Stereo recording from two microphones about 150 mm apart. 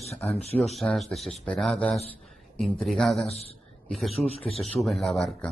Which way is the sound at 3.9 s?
Centre (ahead or behind).